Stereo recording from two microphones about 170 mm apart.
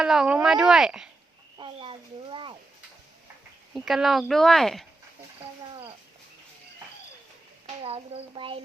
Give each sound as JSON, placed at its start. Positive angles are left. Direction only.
{"t": 0.0, "sound": "speech", "side_deg": -5}
{"t": 1.5, "sound": "a sound", "side_deg": -30}
{"t": 3.8, "sound": "speech", "side_deg": 0}
{"t": 7.8, "sound": "speech", "side_deg": -35}